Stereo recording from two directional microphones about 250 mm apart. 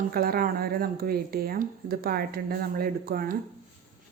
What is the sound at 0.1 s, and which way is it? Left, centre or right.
Speech, right.